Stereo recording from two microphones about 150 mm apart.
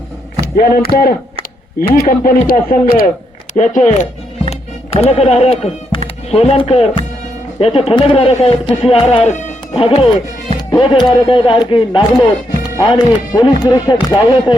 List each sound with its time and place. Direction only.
0.5 s speech: 90° left; by 3.1 s 75° left (ahead or behind)
3.5 s speech: 55° left (ahead or behind)
4.4 s music: 45° left (ahead or behind)
6.3 s speech: 40° left (ahead or behind)